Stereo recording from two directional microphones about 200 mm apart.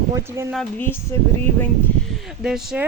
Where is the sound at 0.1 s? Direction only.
15° right (ahead or behind).